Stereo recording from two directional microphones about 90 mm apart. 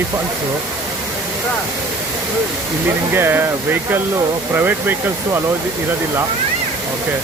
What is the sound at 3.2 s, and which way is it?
Speech, 25° right (ahead or behind).